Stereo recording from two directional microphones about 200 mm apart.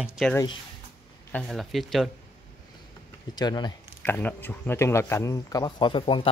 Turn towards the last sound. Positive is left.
turn(degrees=25)  # may be behind; listen again after turning